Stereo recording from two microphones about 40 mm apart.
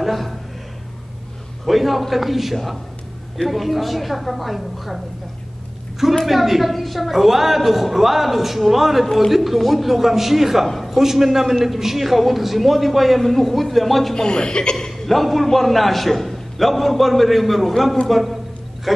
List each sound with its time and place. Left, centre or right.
0.0 s speech: centre
1.7 s a woman's voice: centre
6.2 s a woman's voice: centre
11.0 s a woman's voice: centre
14.1 s speech: centre
15.0 s a woman's voice: centre